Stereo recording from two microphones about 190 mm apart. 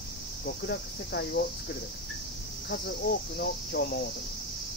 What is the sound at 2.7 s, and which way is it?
Speech, 55° left (ahead or behind).